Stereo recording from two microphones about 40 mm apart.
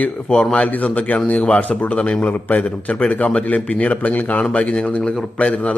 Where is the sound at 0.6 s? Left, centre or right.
Left.